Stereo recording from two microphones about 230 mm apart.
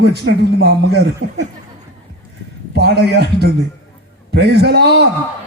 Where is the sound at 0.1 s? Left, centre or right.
Right.